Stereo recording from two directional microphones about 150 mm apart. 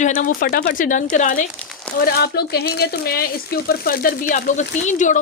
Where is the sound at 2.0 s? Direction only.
90° left; by 5.2 s 55° left (ahead or behind).